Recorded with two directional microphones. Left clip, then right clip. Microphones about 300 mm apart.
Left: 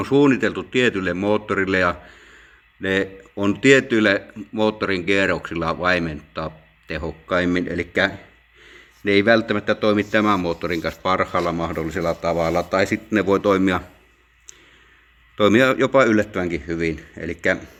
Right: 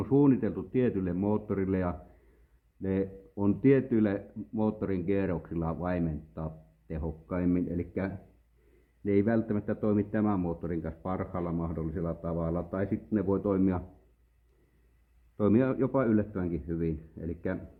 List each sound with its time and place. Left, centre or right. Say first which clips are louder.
0.2 s speech: left 10 dB; centre
9.0 s a man's voice: left 12 dB; centre
15.4 s speech: left 12 dB; centre